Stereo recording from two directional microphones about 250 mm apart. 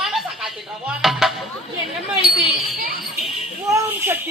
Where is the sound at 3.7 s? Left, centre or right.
Centre.